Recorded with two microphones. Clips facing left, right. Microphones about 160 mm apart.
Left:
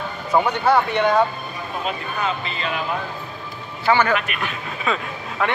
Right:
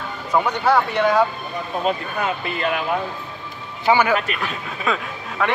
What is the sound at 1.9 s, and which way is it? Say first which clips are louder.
Speech: right 2 dB; 55° right (ahead or behind).